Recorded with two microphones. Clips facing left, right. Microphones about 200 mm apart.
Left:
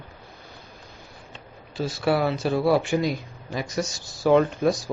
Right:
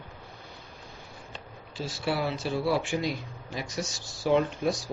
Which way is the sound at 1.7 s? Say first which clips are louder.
Left 7 dB; 60° left (ahead or behind).